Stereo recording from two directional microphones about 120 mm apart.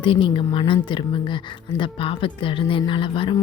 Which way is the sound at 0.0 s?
45° left (ahead or behind).